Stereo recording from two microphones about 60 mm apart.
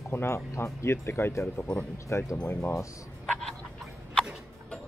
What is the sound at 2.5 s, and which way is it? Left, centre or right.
Speech, left.